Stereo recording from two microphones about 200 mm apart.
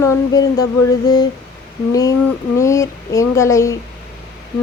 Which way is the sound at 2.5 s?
15° left (ahead or behind).